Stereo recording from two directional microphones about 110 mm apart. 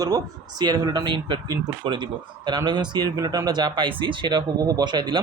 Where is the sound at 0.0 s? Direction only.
35° right (ahead or behind).